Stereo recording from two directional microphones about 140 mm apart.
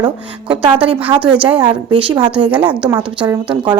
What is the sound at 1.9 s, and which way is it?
Speech, 30° right (ahead or behind).